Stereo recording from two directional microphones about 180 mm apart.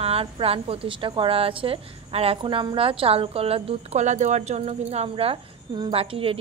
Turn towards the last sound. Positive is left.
turn(degrees=-30)  # may be behind; listen again after turning